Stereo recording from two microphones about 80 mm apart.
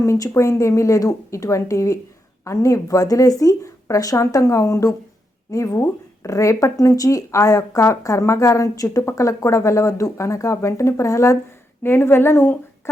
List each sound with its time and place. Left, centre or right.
0.0 s speech: left
11.8 s speech: left